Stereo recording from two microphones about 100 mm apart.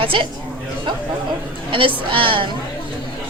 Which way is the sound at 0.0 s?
60° right (ahead or behind).